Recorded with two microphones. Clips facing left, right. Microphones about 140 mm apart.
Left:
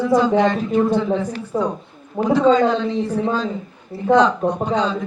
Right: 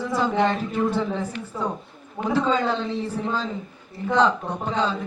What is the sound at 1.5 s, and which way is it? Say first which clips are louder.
Speech: left 8 dB; 35° left (ahead or behind).